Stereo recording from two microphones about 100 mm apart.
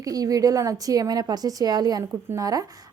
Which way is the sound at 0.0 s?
35° right (ahead or behind).